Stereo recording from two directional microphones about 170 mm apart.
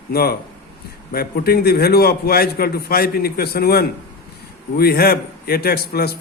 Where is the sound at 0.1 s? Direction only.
65° left (ahead or behind).